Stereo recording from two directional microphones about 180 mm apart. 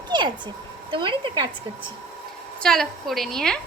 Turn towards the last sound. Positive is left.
turn(degrees=5)  # may be behind; listen again after turning